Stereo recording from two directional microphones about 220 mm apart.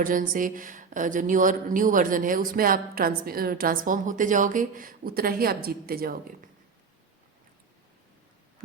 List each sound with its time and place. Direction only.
0.0 s a woman's voice: 35° right (ahead or behind)